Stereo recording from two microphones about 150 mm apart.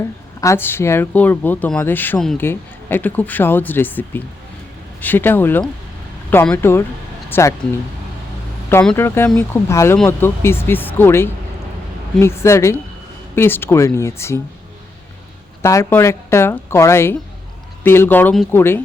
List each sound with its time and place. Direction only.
0.4 s speech: 15° left (ahead or behind)
2.1 s speech: 5° left (ahead or behind)
2.4 s speech: 15° left (ahead or behind)
9.0 s speech: 15° left (ahead or behind)
15.6 s speech: 20° left (ahead or behind)